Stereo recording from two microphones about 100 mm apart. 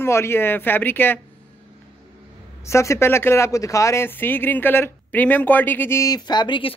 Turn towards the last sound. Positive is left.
turn(degrees=55)  # may be behind; listen again after turning